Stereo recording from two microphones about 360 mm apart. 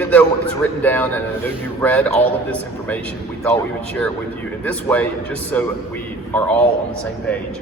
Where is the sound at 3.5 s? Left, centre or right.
Centre.